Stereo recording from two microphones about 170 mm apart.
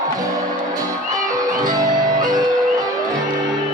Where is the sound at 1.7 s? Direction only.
25° right (ahead or behind).